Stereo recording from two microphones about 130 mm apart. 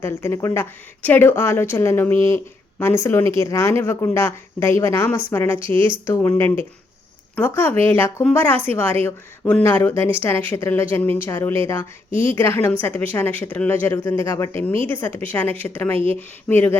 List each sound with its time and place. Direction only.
0.0 s a woman's voice: 20° left (ahead or behind)